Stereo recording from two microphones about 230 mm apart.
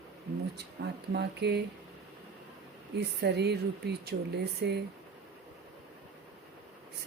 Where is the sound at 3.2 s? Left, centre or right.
Right.